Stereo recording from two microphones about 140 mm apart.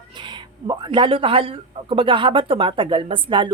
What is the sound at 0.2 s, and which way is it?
Speech, 30° right (ahead or behind).